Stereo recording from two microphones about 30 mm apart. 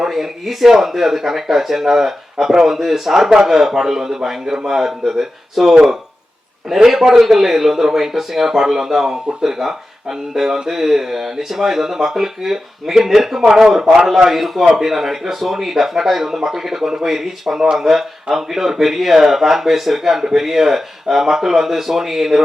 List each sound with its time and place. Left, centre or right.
0.0 s a man's voice: centre